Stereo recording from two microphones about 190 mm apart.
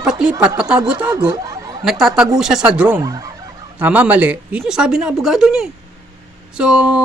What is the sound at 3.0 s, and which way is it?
Speech, 20° right (ahead or behind).